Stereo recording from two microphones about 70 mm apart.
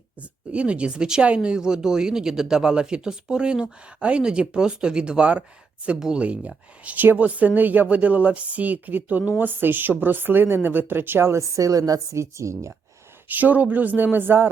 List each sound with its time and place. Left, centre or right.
0.2 s speech: centre; by 11.4 s right
11.5 s a woman's voice: right
13.2 s speech: right